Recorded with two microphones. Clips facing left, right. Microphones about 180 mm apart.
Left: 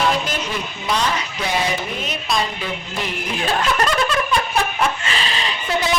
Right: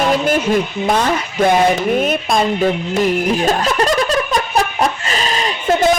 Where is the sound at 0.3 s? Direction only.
50° right (ahead or behind).